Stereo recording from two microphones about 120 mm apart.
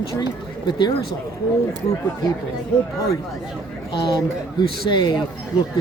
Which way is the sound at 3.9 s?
40° left (ahead or behind).